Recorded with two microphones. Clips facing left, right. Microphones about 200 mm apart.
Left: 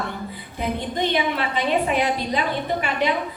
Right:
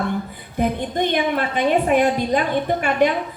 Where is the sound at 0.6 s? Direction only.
50° right (ahead or behind).